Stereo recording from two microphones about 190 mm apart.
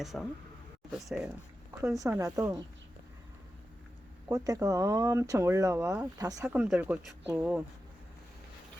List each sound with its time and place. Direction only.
0.0 s speech: centre (ahead or behind)
2.0 s speech: 20° right (ahead or behind)
4.3 s speech: 20° right (ahead or behind)